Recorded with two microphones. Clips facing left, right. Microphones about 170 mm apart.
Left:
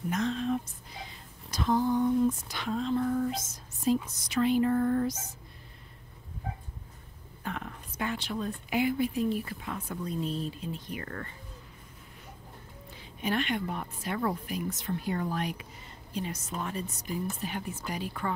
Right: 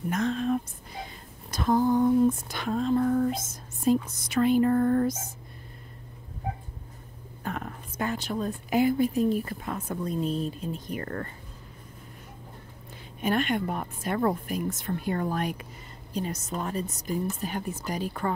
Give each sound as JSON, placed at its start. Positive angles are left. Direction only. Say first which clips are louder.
{"t": 0.1, "sound": "a sound", "louder": "right 3 dB", "side_deg": -50}
{"t": 7.4, "sound": "a woman's voice", "louder": "right 3 dB", "side_deg": -45}
{"t": 13.2, "sound": "a woman's voice", "louder": "right 4 dB", "side_deg": -50}